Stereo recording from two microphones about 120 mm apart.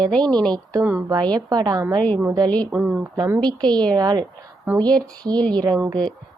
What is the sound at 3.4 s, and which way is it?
Speech, 40° right (ahead or behind).